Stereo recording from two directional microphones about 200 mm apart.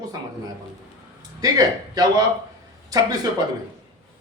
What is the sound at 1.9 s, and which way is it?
Speech, 20° right (ahead or behind).